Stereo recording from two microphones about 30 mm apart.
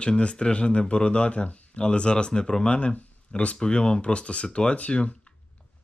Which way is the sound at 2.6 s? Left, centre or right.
Left.